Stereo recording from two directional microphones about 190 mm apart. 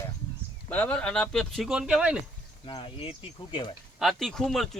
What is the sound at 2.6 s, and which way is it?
Speech, 30° left (ahead or behind).